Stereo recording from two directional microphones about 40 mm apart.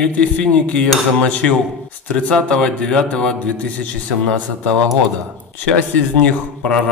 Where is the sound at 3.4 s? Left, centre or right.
Left.